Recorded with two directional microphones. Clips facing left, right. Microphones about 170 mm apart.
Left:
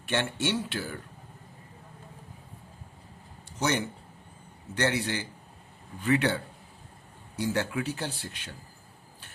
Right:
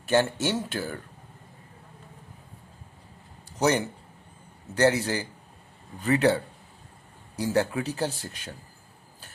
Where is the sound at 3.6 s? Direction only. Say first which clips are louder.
Right 5 dB; 35° right (ahead or behind).